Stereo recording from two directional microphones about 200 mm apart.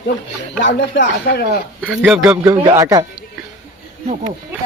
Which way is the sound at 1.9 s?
5° right (ahead or behind).